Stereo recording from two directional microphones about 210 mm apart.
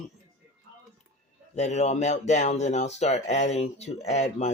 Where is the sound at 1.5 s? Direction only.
35° left (ahead or behind).